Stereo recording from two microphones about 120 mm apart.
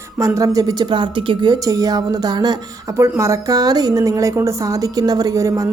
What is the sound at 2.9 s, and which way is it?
A woman's voice, 25° right (ahead or behind).